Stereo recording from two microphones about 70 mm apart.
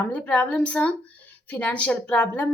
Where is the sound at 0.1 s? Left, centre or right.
Centre.